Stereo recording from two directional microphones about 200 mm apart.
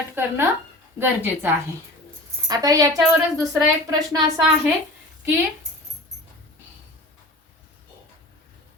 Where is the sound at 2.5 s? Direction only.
20° right (ahead or behind).